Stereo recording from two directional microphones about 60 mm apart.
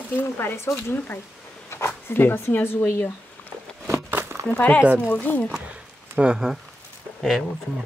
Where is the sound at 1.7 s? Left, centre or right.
Left.